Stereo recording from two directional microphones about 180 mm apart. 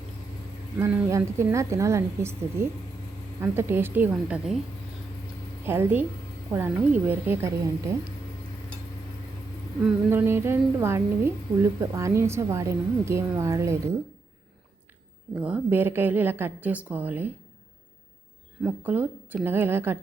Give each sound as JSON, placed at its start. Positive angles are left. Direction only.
{"t": 0.8, "sound": "a woman's voice", "side_deg": -15}
{"t": 5.6, "sound": "a woman's voice", "side_deg": -10}
{"t": 9.8, "sound": "a woman's voice", "side_deg": -10}
{"t": 15.4, "sound": "a woman's voice", "side_deg": -5}
{"t": 18.6, "sound": "a woman's voice", "side_deg": -10}